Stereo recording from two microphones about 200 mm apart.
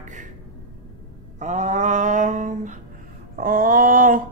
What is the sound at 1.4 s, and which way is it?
A woman's voice, 35° right (ahead or behind).